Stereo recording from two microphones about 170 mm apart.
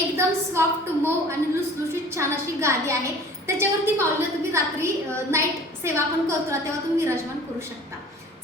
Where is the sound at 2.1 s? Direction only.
15° right (ahead or behind).